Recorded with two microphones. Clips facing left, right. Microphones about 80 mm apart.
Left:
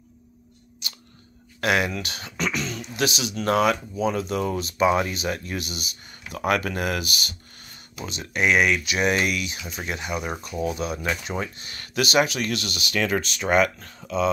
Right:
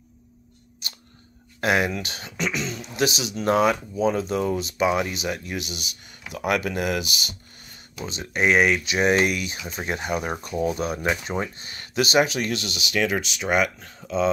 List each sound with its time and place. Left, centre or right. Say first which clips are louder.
1.6 s speech: right 1 dB; right
10.8 s speech: right 2 dB; right
11.2 s speech: right 2 dB; right